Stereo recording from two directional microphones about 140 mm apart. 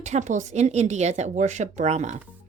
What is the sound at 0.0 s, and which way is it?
Speech, 55° right (ahead or behind).